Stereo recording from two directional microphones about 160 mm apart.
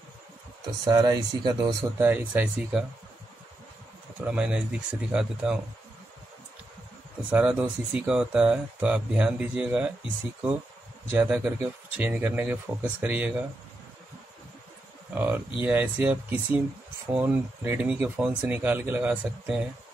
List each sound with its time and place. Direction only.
0.8 s speech: 25° right (ahead or behind)
2.0 s speech: 10° right (ahead or behind)
4.2 s speech: 5° right (ahead or behind)
7.2 s speech: 10° right (ahead or behind)
11.1 s speech: 10° right (ahead or behind)
15.1 s speech: 10° right (ahead or behind)